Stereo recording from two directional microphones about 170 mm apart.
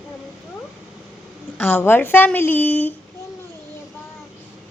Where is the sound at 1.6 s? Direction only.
10° left (ahead or behind).